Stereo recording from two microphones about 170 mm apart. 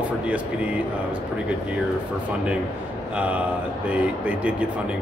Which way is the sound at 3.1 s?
10° right (ahead or behind).